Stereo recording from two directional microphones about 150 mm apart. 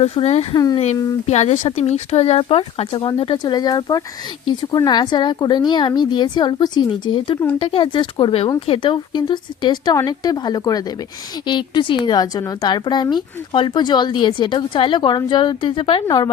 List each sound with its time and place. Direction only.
0.0 s speech: 40° left (ahead or behind)
0.5 s speech: 25° left (ahead or behind)
1.3 s a woman's voice: 45° left (ahead or behind); by 16.3 s 30° left (ahead or behind)